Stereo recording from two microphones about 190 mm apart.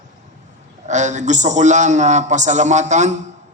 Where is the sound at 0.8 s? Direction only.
40° right (ahead or behind).